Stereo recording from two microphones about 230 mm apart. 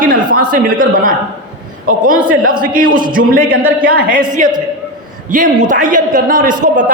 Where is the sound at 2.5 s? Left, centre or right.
Right.